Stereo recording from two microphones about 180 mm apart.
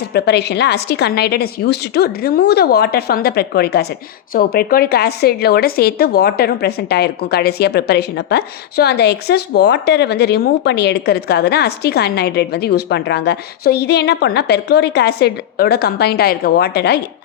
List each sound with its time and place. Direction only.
0.1 s speech: 65° left (ahead or behind)